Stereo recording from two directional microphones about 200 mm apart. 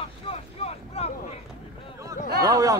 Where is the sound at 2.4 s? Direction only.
20° right (ahead or behind).